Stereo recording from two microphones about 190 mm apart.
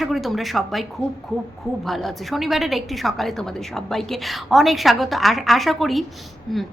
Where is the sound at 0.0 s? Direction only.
Centre (ahead or behind).